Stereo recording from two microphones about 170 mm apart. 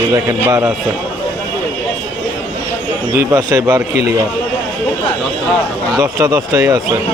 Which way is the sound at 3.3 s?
15° right (ahead or behind).